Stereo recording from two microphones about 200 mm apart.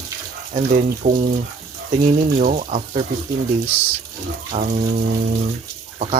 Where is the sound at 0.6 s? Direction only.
35° right (ahead or behind).